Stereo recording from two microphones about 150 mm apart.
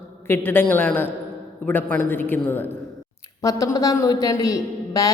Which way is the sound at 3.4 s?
25° left (ahead or behind).